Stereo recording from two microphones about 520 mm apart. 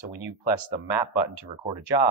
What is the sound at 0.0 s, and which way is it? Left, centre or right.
Speech, left.